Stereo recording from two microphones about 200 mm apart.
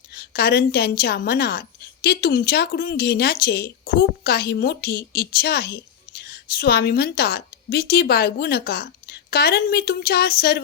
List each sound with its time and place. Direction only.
0.1 s a woman's voice: 55° left (ahead or behind)